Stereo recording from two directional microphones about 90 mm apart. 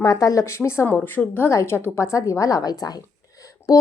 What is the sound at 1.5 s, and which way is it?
A woman's voice, 30° left (ahead or behind).